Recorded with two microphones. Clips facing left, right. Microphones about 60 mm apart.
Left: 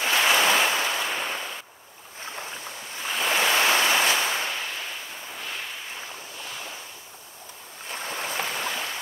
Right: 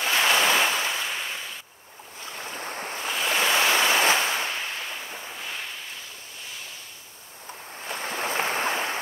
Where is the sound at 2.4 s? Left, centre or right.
Right.